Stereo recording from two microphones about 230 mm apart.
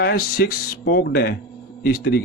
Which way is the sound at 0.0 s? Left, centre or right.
Left.